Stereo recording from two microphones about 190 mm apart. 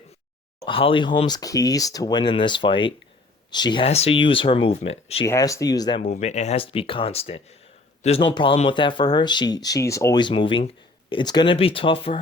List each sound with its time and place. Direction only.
0.6 s speech: 30° left (ahead or behind)
5.2 s speech: 15° left (ahead or behind)
6.0 s speech: 35° left (ahead or behind)